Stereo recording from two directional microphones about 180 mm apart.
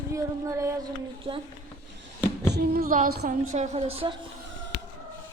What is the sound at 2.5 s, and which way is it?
Speech, 55° right (ahead or behind).